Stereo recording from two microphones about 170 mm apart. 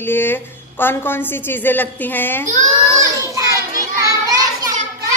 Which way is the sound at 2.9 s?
20° right (ahead or behind).